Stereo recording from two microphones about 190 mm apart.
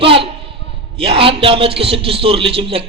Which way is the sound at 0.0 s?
30° right (ahead or behind).